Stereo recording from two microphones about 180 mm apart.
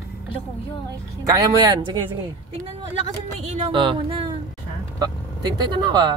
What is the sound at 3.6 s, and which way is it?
Speech, 30° right (ahead or behind).